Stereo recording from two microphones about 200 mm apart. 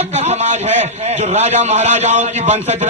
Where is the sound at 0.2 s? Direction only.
35° right (ahead or behind).